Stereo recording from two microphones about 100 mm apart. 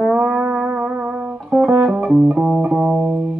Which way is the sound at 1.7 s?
20° right (ahead or behind).